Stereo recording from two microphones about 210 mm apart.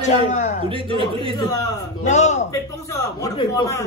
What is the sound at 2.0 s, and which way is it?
Speech, 35° left (ahead or behind).